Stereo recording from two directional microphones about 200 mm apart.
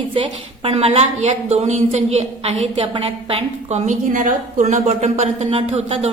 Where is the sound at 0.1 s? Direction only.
25° right (ahead or behind).